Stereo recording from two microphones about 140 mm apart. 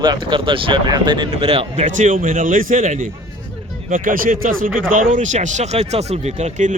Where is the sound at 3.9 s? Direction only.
75° right (ahead or behind).